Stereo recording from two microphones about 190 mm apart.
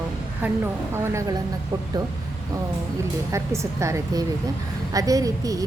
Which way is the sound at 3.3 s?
15° right (ahead or behind).